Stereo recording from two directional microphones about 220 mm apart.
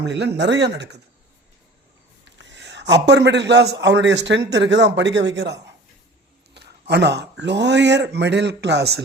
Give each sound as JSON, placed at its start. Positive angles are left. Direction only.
{"t": 0.0, "sound": "speech", "side_deg": -50}
{"t": 2.2, "sound": "a man's voice", "side_deg": -55}